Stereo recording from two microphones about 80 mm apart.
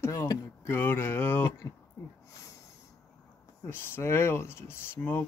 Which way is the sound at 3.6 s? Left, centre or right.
Left.